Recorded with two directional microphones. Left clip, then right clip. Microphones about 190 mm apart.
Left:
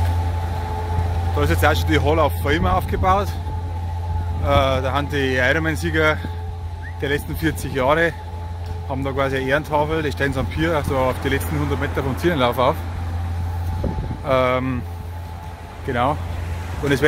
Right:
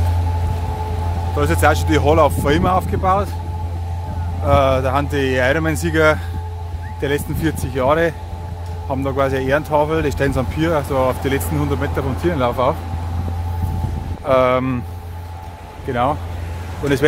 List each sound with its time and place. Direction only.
1.3 s speech: 5° right (ahead or behind)
3.0 s speech: centre (ahead or behind)
4.5 s speech: 10° right (ahead or behind)
14.2 s speech: 15° right (ahead or behind)
15.9 s speech: 5° right (ahead or behind)